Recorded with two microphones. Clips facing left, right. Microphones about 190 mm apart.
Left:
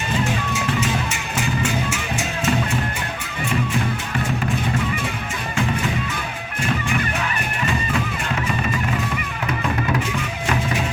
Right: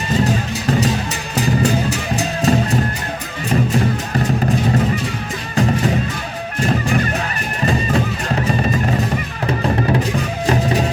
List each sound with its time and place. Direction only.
0.3 s music: 35° right (ahead or behind)
5.5 s music: 40° right (ahead or behind)